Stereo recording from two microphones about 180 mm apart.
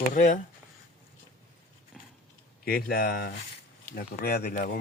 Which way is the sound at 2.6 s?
55° left (ahead or behind).